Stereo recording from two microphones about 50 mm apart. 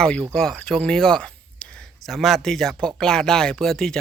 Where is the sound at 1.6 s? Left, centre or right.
Centre.